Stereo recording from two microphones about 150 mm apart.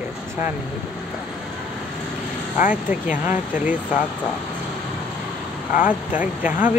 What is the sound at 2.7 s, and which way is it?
Speech, 10° right (ahead or behind).